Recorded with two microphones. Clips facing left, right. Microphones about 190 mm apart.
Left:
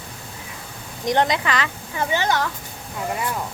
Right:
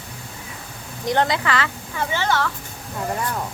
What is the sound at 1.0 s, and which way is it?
A woman's voice, 20° left (ahead or behind).